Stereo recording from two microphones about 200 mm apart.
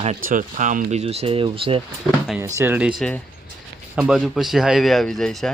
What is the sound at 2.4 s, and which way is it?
Speech, 10° right (ahead or behind).